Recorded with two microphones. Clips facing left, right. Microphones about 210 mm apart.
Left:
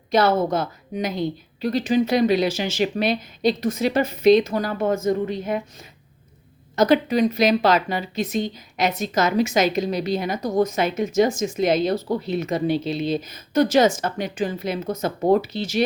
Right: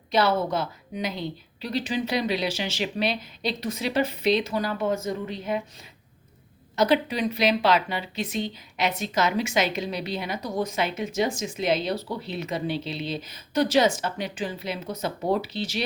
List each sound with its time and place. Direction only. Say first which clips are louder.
0.1 s speech: left 4 dB; 50° left (ahead or behind)
6.7 s speech: left 5 dB; 45° left (ahead or behind)